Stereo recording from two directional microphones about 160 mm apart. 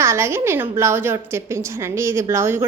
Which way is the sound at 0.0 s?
15° right (ahead or behind).